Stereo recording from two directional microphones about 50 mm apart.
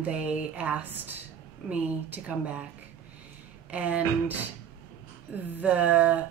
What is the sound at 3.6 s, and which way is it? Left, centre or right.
Speech, right.